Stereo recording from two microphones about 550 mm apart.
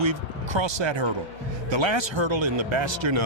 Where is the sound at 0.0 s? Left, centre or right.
Right.